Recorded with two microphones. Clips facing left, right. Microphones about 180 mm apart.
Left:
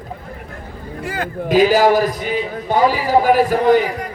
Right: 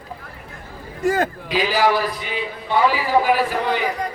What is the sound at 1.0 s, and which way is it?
Speech, 45° right (ahead or behind).